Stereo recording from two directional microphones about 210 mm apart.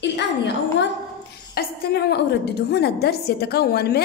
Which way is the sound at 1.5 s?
45° left (ahead or behind).